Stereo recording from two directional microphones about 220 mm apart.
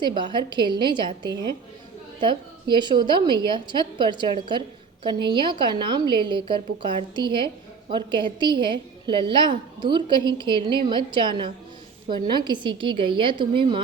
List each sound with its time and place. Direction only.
0.0 s a woman's voice: 20° right (ahead or behind)